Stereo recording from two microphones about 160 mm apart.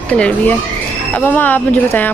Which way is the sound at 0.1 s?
10° left (ahead or behind).